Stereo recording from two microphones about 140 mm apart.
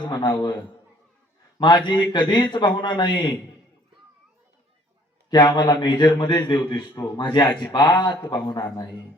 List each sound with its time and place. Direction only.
0.0 s a man's voice: 30° left (ahead or behind)
5.3 s a man's voice: 30° left (ahead or behind)